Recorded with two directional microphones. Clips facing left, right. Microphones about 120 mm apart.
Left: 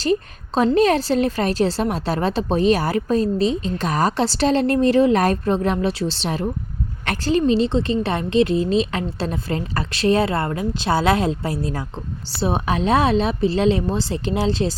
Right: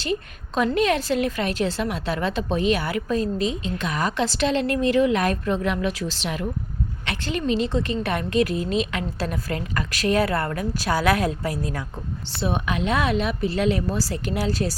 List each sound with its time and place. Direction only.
0.0 s a woman's voice: 35° left (ahead or behind)
7.0 s a woman's voice: 45° left (ahead or behind)
7.3 s a woman's voice: 30° left (ahead or behind)